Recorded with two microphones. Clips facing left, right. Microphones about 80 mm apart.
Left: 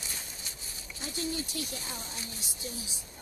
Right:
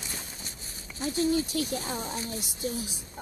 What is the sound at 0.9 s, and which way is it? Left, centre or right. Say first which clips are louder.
Speech: right 9 dB; right.